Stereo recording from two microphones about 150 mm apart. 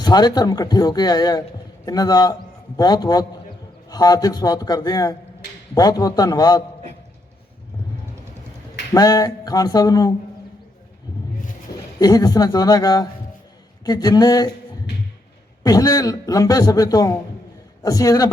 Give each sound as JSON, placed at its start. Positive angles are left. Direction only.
{"t": 0.0, "sound": "speech", "side_deg": 25}
{"t": 8.9, "sound": "speech", "side_deg": 25}
{"t": 11.9, "sound": "speech", "side_deg": 25}
{"t": 15.6, "sound": "speech", "side_deg": 25}